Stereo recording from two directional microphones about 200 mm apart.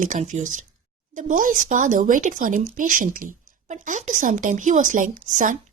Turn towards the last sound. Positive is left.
turn(degrees=-40)  # may be behind; listen again after turning